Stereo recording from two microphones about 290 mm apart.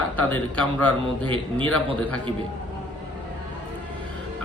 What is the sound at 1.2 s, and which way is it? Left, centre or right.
Speech, centre.